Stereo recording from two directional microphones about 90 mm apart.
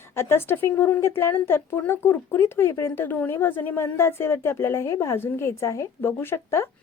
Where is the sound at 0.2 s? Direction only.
25° left (ahead or behind).